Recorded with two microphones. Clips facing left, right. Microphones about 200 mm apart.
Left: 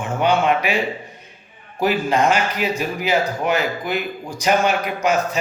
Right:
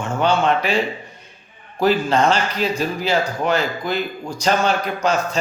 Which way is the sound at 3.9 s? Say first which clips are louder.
Right 1 dB; 15° left (ahead or behind).